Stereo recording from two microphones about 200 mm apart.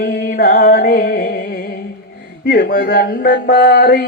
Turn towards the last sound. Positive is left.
turn(degrees=50)  # may be behind; listen again after turning